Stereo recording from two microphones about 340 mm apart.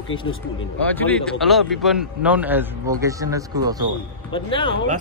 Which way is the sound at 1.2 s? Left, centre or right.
Centre.